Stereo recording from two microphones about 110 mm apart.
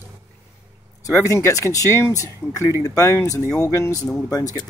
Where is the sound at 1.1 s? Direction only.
25° left (ahead or behind).